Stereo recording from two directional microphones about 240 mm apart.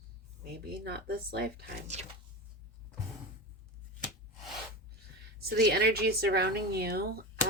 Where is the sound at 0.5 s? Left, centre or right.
Right.